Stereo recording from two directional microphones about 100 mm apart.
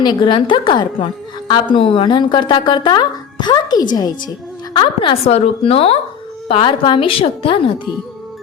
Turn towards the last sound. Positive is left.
turn(degrees=65)  # may be behind; listen again after turning